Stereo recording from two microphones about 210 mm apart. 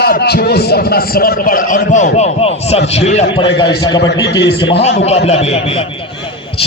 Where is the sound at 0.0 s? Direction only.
50° left (ahead or behind); by 3.2 s 30° left (ahead or behind).